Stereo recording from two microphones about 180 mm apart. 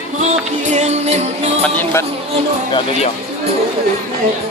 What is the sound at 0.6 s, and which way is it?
Music, 40° right (ahead or behind).